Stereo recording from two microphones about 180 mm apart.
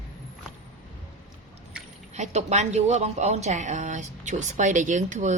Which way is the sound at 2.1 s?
40° right (ahead or behind).